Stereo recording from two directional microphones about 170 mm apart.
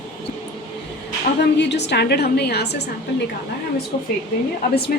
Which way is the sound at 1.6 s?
90° left.